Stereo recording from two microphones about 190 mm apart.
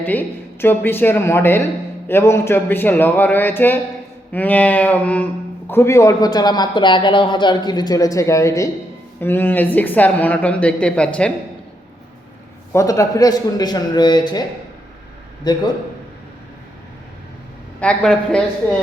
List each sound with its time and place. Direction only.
0.0 s speech: 10° left (ahead or behind)
12.7 s a man's voice: 15° left (ahead or behind)
15.5 s a man's voice: 20° left (ahead or behind)
17.7 s a man's voice: 5° left (ahead or behind)